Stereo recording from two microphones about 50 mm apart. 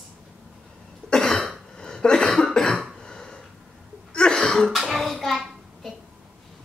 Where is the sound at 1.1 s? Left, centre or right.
Centre.